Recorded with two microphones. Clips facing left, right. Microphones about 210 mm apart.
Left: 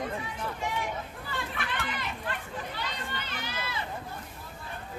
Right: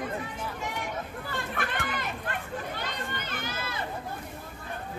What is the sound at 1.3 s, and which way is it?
Speech, 50° right (ahead or behind).